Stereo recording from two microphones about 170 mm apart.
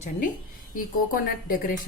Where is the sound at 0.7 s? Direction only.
55° left (ahead or behind).